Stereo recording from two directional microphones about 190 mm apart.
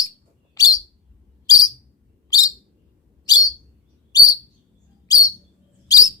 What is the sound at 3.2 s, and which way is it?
Bird, 20° left (ahead or behind).